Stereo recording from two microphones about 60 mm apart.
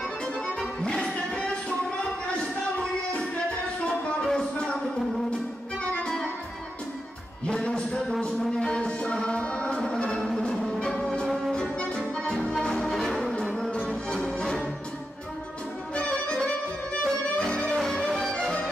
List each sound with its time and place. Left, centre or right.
0.6 s music: centre
3.8 s a sound: centre
6.0 s music: centre
7.4 s music: centre
15.9 s music: centre
17.6 s music: centre
18.3 s music: centre